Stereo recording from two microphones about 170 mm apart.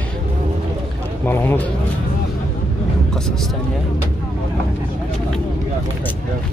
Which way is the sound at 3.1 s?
Centre (ahead or behind).